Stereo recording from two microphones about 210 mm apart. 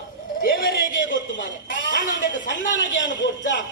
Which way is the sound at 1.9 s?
60° left (ahead or behind).